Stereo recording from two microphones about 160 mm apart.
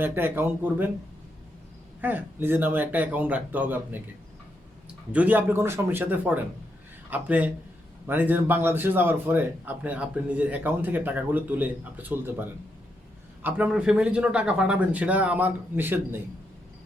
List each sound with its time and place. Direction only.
0.0 s speech: 15° right (ahead or behind)
2.0 s speech: 10° right (ahead or behind)
5.1 s speech: 10° right (ahead or behind)